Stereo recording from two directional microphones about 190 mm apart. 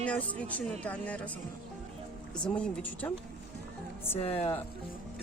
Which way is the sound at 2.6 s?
5° left (ahead or behind).